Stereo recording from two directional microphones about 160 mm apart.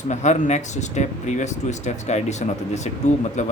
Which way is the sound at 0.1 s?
45° left (ahead or behind).